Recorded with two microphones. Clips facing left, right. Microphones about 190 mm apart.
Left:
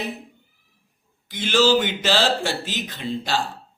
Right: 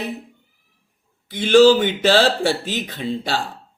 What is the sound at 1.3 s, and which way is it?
Speech, 55° right (ahead or behind).